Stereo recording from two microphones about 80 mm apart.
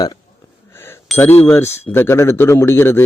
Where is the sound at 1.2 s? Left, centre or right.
Left.